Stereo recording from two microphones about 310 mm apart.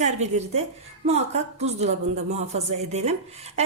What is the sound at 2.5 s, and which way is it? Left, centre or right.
Speech, right.